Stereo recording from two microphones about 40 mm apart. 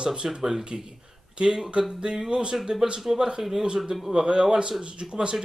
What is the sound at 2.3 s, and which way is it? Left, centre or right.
Speech, right.